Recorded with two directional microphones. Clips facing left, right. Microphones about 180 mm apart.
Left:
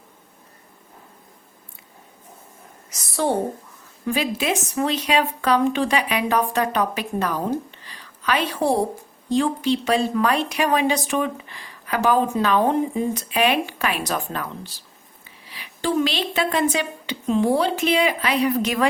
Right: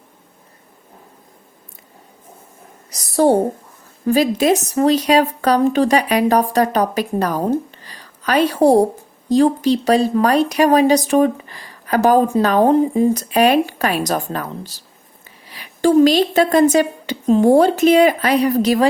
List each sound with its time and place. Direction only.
2.9 s a woman's voice: 40° right (ahead or behind)